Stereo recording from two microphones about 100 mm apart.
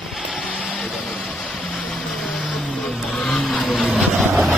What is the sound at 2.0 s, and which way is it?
Vehicle, 5° left (ahead or behind).